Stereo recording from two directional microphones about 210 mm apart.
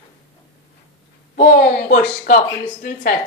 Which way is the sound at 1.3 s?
40° left (ahead or behind).